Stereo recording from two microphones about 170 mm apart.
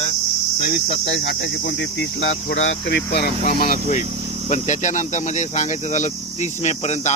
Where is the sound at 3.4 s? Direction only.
55° left (ahead or behind).